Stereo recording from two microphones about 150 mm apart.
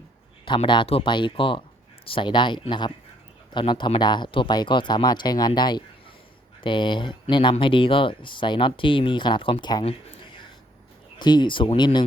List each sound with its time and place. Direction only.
0.4 s speech: 35° left (ahead or behind)
11.2 s speech: 30° left (ahead or behind)